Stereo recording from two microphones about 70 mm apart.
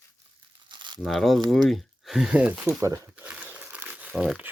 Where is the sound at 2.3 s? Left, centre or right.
Centre.